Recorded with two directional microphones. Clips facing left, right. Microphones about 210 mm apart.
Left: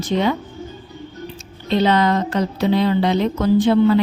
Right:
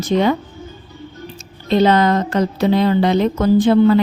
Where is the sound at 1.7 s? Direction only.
45° right (ahead or behind).